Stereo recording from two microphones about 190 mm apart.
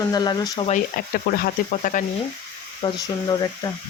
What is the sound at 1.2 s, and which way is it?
Speech, 50° left (ahead or behind).